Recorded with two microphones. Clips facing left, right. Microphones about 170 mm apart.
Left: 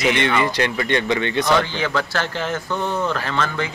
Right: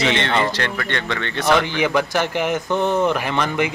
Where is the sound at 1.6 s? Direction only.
15° right (ahead or behind).